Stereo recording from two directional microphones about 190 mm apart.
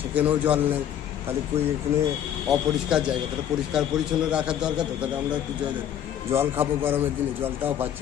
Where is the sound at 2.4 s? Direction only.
5° right (ahead or behind).